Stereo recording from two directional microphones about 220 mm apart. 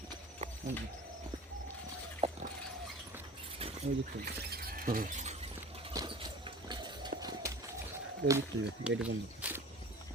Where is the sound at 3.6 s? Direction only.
25° right (ahead or behind).